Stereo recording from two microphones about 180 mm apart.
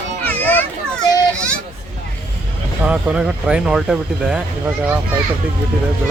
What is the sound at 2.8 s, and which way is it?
Speech, 5° right (ahead or behind).